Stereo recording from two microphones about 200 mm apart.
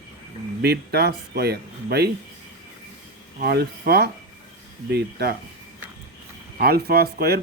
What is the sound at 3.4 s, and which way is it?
Speech, 50° right (ahead or behind).